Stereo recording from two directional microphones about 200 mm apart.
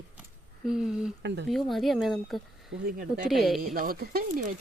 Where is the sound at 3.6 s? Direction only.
45° right (ahead or behind).